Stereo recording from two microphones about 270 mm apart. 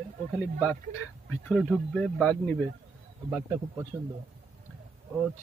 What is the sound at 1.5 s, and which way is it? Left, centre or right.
Speech, centre.